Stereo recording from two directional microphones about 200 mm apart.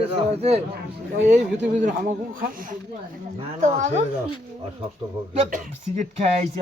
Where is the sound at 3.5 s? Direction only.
35° right (ahead or behind).